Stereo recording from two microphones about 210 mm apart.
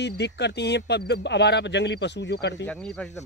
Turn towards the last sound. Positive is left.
turn(degrees=5)  # may be behind; listen again after turning